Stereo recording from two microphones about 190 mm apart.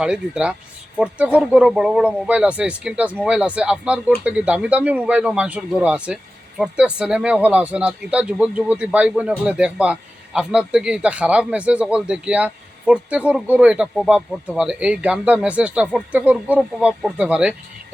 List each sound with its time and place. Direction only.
0.0 s a man's voice: 5° right (ahead or behind)